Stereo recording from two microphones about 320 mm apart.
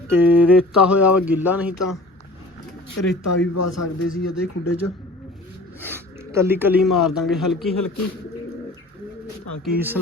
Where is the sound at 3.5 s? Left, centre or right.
Left.